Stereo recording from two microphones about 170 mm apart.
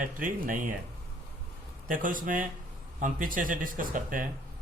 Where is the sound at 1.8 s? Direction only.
50° right (ahead or behind).